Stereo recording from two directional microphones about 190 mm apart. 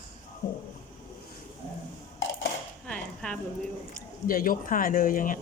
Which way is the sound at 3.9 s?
45° left (ahead or behind).